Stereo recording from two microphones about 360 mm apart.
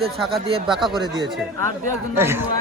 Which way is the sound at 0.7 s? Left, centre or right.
Centre.